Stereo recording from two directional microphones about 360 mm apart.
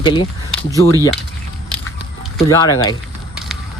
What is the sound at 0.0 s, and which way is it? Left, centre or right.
Speech, centre.